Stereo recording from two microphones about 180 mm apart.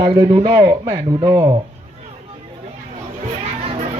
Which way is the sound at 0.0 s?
25° right (ahead or behind).